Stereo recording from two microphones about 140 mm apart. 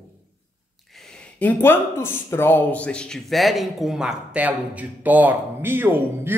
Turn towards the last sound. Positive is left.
turn(degrees=-15)  # may be behind; listen again after turning